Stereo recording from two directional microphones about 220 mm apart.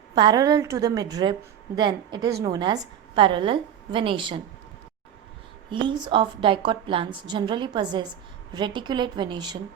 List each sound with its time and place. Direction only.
0.2 s a woman's voice: 20° right (ahead or behind)
5.7 s a woman's voice: 20° right (ahead or behind)